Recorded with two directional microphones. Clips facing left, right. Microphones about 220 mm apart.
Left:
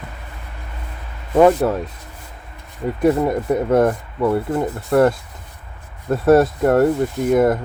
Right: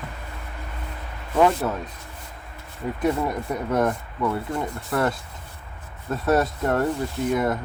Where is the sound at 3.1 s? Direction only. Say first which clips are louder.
Left 8 dB; 50° left (ahead or behind).